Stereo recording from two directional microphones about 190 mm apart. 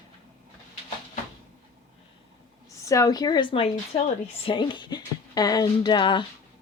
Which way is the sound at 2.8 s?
20° left (ahead or behind).